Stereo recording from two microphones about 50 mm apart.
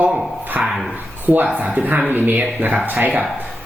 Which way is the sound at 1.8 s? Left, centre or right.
Right.